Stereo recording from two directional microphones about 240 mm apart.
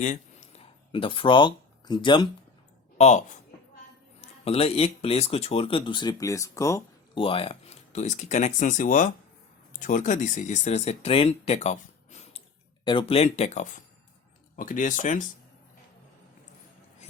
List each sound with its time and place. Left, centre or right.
0.0 s speech: left
3.0 s speech: left
4.4 s speech: left